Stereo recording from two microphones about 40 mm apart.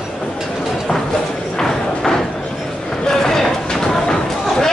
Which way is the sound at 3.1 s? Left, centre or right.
Centre.